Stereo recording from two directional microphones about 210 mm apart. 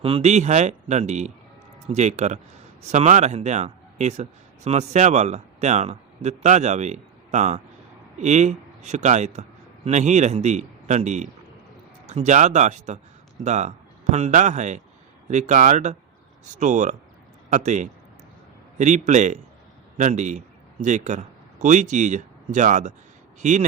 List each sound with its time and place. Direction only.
0.0 s a man's voice: 30° right (ahead or behind)